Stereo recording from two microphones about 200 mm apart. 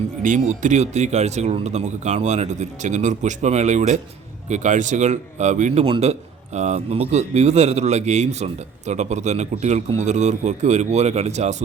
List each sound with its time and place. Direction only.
0.2 s speech: 40° right (ahead or behind)